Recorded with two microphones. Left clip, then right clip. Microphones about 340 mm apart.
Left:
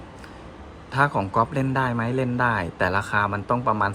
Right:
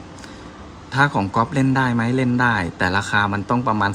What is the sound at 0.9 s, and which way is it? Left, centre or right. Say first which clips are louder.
A man's voice: right 3 dB; centre.